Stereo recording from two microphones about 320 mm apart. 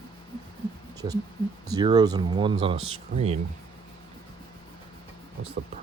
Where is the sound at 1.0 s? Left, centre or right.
Centre.